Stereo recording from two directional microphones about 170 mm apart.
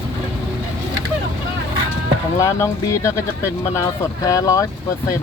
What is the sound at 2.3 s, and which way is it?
Speech, 15° left (ahead or behind).